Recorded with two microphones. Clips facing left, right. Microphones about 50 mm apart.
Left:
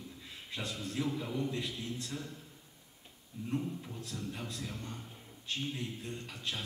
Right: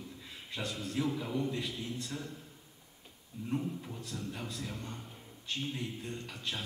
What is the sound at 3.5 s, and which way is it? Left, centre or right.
A man's voice, centre.